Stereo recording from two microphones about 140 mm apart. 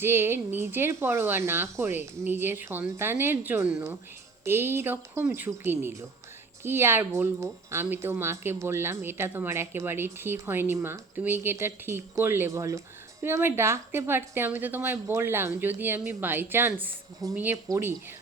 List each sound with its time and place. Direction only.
0.0 s speech: 15° right (ahead or behind)